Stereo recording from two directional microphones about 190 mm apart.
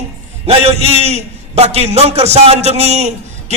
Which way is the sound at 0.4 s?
35° right (ahead or behind).